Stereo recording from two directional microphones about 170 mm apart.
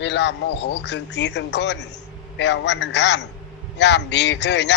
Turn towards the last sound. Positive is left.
turn(degrees=90)